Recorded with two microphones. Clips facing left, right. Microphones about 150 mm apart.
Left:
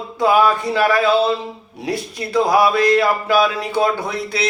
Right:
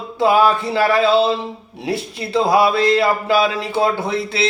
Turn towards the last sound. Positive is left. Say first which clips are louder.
# right 2 dB
turn(degrees=-25)  # may be behind; listen again after turning